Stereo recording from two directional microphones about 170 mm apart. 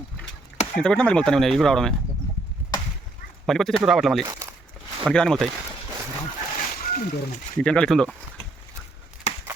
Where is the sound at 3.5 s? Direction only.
Centre (ahead or behind).